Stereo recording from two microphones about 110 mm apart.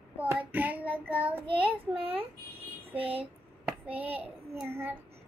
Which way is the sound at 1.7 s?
55° right (ahead or behind).